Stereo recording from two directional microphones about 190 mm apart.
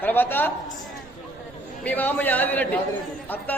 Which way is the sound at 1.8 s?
10° left (ahead or behind).